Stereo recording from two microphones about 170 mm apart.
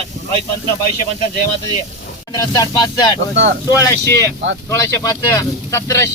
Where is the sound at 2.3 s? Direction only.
20° left (ahead or behind).